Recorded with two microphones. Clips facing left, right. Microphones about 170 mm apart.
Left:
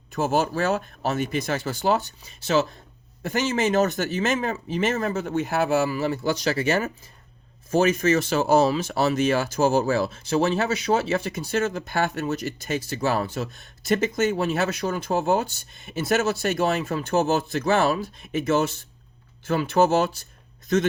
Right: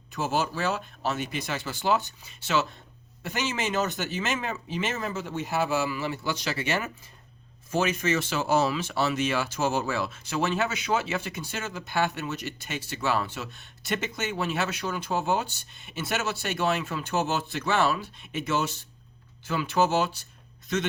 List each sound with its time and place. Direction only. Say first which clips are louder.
0.1 s speech: left 5 dB; 50° left (ahead or behind)
3.2 s speech: left 7 dB; 45° left (ahead or behind)